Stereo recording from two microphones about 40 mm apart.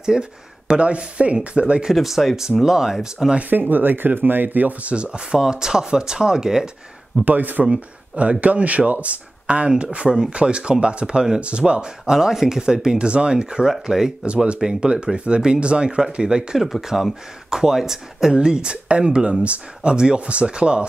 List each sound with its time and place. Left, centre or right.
0.0 s speech: centre
2.0 s speech: centre
3.3 s speech: right
4.9 s speech: right
5.4 s speech: centre
7.2 s speech: right
7.7 s speech: right
9.5 s speech: right
14.2 s speech: right
14.6 s speech: centre
16.5 s speech: centre; by 20.8 s right